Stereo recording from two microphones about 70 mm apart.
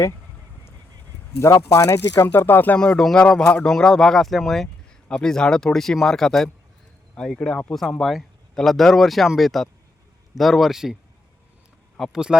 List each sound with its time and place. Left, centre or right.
1.5 s speech: left
2.2 s speech: left
2.7 s speech: centre
11.9 s speech: centre